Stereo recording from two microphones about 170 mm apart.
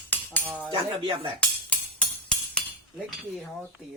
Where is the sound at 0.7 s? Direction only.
30° right (ahead or behind).